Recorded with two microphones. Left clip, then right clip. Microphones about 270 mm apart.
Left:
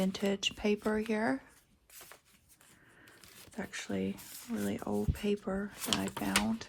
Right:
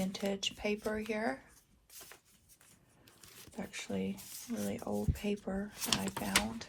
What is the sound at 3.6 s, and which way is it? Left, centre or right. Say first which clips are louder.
Speech: left 2 dB; left.